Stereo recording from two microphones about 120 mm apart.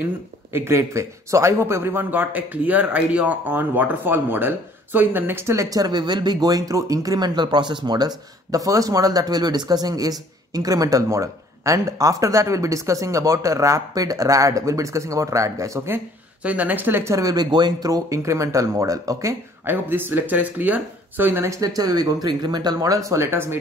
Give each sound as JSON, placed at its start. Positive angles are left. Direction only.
{"t": 0.0, "sound": "speech", "side_deg": -20}
{"t": 16.4, "sound": "speech", "side_deg": -15}